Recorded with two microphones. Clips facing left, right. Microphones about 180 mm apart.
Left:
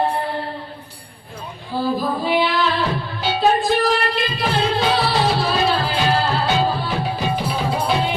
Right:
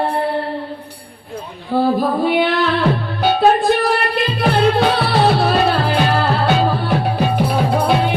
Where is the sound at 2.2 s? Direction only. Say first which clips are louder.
Right 3 dB; 55° right (ahead or behind).